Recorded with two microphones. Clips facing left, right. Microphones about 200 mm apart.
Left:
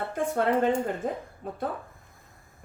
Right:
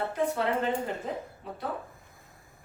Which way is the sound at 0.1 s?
50° left (ahead or behind).